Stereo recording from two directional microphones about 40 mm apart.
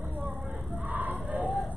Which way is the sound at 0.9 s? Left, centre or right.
Right.